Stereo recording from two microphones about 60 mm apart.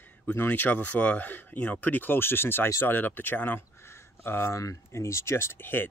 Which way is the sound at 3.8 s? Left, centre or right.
Left.